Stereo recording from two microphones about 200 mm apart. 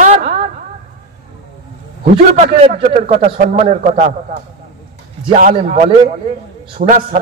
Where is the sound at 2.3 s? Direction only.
35° right (ahead or behind).